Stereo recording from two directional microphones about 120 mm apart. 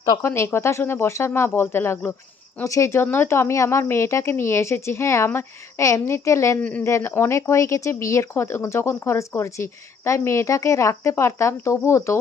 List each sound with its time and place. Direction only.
0.2 s speech: 20° left (ahead or behind)
6.6 s speech: 10° left (ahead or behind)
6.8 s speech: 20° left (ahead or behind)